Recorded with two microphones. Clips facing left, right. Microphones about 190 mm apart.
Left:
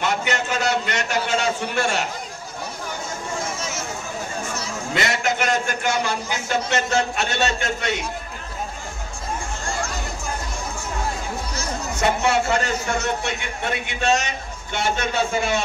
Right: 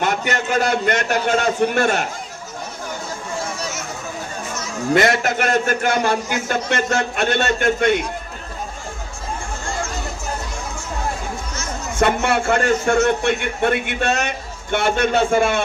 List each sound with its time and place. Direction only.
0.0 s a man's voice: 50° right (ahead or behind)
4.9 s a man's voice: 50° right (ahead or behind)
11.9 s a man's voice: 55° right (ahead or behind)